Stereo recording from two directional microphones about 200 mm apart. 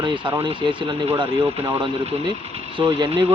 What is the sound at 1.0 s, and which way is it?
Speech, 25° right (ahead or behind).